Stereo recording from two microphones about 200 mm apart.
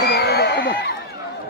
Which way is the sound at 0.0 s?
55° left (ahead or behind).